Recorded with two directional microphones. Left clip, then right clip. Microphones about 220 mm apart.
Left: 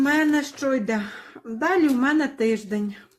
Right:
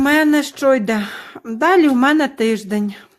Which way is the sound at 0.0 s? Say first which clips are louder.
Right 6 dB; 40° right (ahead or behind).